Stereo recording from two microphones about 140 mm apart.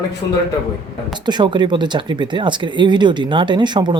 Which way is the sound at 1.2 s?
30° right (ahead or behind).